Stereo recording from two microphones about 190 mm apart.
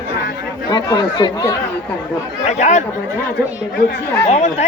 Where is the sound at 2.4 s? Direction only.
40° left (ahead or behind).